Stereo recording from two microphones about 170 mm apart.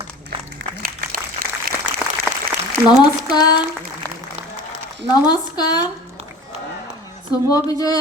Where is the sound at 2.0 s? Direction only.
5° right (ahead or behind).